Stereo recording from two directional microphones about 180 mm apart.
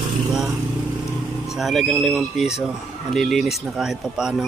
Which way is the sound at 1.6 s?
Centre (ahead or behind).